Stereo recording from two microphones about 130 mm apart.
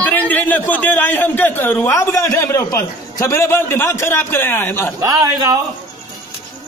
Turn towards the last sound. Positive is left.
turn(degrees=-30)  # may be behind; listen again after turning